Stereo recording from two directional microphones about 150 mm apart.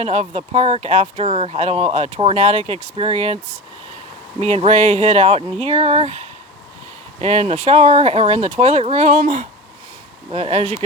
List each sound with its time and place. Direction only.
0.0 s speech: 45° right (ahead or behind)
10.3 s speech: 45° right (ahead or behind)